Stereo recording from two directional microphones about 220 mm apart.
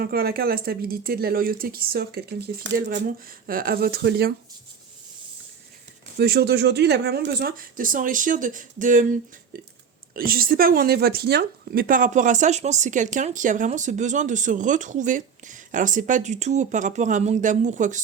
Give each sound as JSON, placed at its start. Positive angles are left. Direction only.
{"t": 0.0, "sound": "speech", "side_deg": -45}
{"t": 6.1, "sound": "speech", "side_deg": -45}
{"t": 10.2, "sound": "speech", "side_deg": -40}